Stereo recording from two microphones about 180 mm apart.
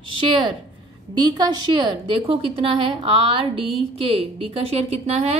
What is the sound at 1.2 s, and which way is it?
A woman's voice, 25° right (ahead or behind).